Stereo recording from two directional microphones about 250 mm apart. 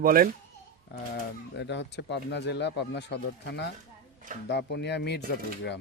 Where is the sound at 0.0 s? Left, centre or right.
Right.